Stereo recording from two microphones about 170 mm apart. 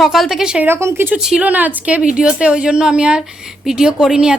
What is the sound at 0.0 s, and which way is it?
A woman's voice, centre (ahead or behind).